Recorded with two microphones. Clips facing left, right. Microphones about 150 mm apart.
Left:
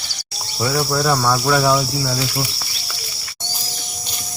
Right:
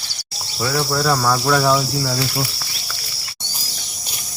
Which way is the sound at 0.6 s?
10° left (ahead or behind).